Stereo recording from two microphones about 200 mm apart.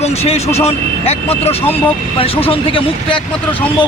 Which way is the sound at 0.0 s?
30° left (ahead or behind).